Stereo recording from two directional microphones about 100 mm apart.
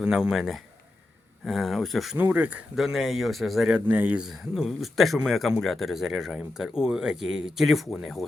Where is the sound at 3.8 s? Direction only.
15° right (ahead or behind).